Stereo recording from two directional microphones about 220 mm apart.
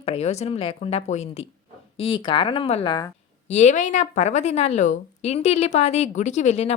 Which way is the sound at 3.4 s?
30° left (ahead or behind).